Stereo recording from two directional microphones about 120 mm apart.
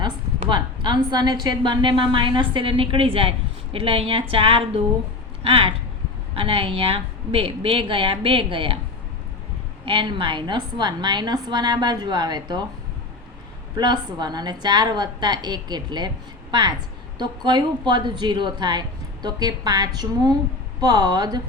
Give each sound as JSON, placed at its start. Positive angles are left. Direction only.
{"t": 0.0, "sound": "a woman's voice", "side_deg": -40}
{"t": 9.8, "sound": "speech", "side_deg": -45}
{"t": 13.7, "sound": "speech", "side_deg": -35}